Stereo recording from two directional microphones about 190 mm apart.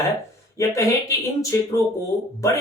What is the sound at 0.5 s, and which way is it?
Speech, 15° left (ahead or behind).